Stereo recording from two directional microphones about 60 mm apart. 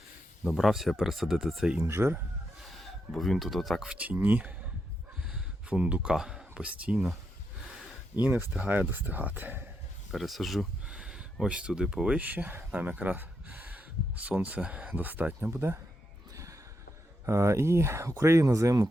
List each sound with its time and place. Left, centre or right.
0.5 s speech: centre
1.8 s speech: right
2.6 s speech: centre
3.8 s speech: right
5.2 s speech: centre
8.1 s speech: right
10.1 s speech: centre
10.8 s speech: centre
15.4 s speech: right
16.3 s a sound: right
17.2 s speech: right